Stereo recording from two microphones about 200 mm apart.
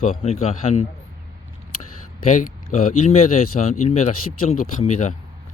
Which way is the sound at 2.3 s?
40° left (ahead or behind).